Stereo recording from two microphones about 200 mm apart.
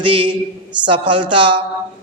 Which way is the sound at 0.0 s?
25° right (ahead or behind).